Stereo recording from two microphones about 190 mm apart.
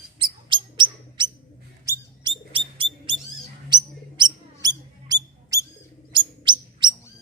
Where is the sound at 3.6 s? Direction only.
25° right (ahead or behind).